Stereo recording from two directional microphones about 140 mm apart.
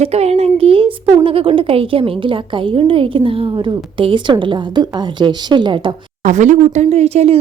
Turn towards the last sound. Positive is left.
turn(degrees=-50)  # may be behind; listen again after turning